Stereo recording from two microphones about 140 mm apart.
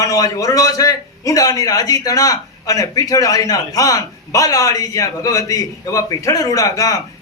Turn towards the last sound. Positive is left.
turn(degrees=25)  # may be behind; listen again after turning